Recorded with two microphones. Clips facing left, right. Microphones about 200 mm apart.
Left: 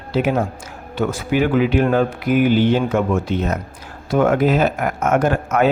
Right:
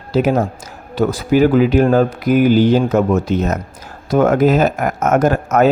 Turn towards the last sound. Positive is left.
turn(degrees=-40)  # may be behind; listen again after turning